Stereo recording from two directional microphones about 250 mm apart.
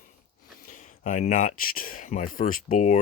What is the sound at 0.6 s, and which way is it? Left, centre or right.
Speech, left.